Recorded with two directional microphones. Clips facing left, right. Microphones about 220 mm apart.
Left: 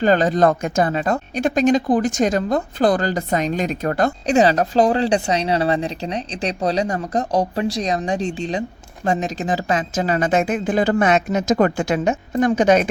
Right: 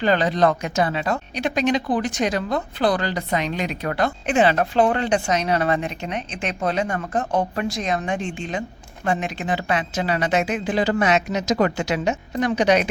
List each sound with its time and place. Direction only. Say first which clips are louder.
0.0 s speech: left 3 dB; 45° left (ahead or behind)